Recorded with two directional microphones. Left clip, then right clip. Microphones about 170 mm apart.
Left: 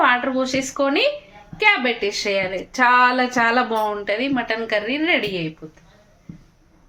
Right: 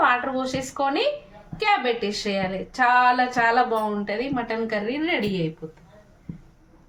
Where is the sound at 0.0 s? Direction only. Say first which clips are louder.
Left 3 dB; 35° left (ahead or behind).